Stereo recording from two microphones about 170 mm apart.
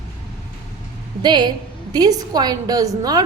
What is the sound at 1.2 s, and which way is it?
A woman's voice, 25° right (ahead or behind).